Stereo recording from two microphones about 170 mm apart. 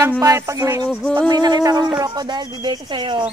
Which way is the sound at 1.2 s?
25° right (ahead or behind).